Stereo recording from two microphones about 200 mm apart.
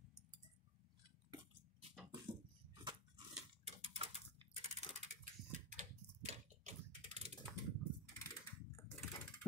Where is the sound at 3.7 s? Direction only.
30° right (ahead or behind).